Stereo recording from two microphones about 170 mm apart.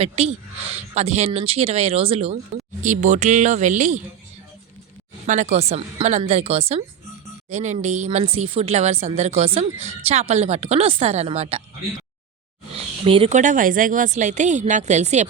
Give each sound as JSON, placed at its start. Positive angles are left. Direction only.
{"t": 0.0, "sound": "speech", "side_deg": -35}
{"t": 2.8, "sound": "a woman's voice", "side_deg": -45}
{"t": 5.2, "sound": "speech", "side_deg": -45}
{"t": 12.7, "sound": "a sound", "side_deg": -35}
{"t": 13.3, "sound": "a woman's voice", "side_deg": -45}